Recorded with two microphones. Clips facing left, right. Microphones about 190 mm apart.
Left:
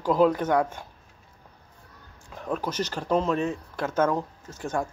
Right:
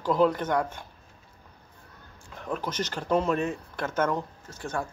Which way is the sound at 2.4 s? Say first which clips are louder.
Left 2 dB; 5° left (ahead or behind).